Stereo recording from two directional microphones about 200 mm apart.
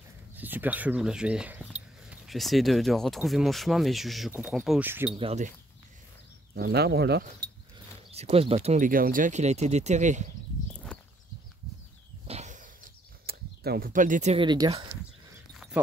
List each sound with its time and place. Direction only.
0.4 s speech: 10° right (ahead or behind)
5.1 s speech: 30° right (ahead or behind)
6.5 s speech: 50° right (ahead or behind)
8.1 s speech: 30° right (ahead or behind)
12.3 s a sound: 35° right (ahead or behind); by 14.9 s 20° right (ahead or behind)
15.5 s dog: 5° right (ahead or behind)